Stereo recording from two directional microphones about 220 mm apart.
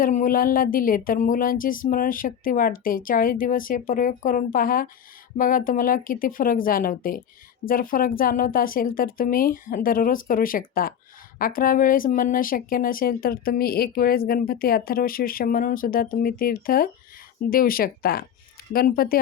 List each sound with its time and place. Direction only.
0.0 s a woman's voice: 35° left (ahead or behind)